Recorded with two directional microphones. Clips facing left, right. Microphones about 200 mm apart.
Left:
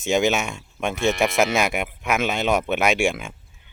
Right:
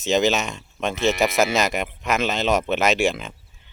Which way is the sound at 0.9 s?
Centre (ahead or behind).